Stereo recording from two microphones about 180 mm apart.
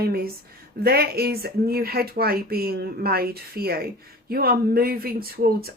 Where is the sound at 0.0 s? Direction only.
55° right (ahead or behind).